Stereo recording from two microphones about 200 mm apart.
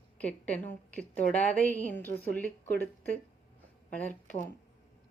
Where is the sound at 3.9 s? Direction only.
5° left (ahead or behind).